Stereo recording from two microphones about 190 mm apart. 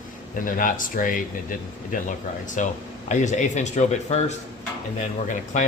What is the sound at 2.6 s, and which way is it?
Speech, 40° left (ahead or behind).